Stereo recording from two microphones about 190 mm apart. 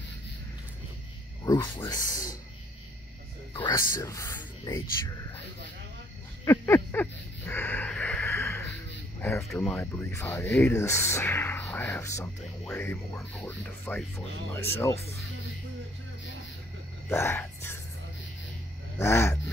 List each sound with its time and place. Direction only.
1.4 s speech: 20° left (ahead or behind)
3.5 s speech: 20° left (ahead or behind)
6.4 s a sound: 15° left (ahead or behind)
9.2 s speech: 15° left (ahead or behind)
17.1 s speech: 10° left (ahead or behind)
18.9 s a sound: 15° left (ahead or behind)